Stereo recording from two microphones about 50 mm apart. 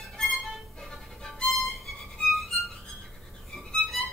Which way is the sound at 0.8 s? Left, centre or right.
Centre.